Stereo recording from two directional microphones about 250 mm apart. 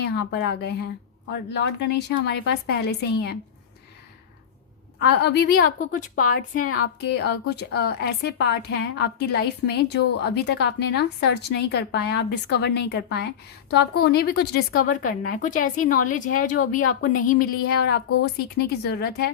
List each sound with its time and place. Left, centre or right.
0.0 s a woman's voice: left
4.9 s a woman's voice: left
18.5 s a woman's voice: left